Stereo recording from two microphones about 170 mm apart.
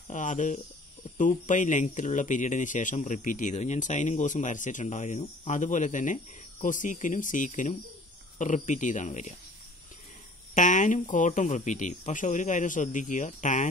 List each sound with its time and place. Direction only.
0.1 s speech: 50° left (ahead or behind)
10.5 s speech: 50° left (ahead or behind)